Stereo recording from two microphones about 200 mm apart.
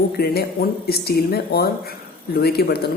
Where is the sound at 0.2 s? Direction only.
50° left (ahead or behind).